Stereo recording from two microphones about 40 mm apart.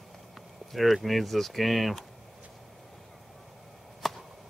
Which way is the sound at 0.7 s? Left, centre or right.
Centre.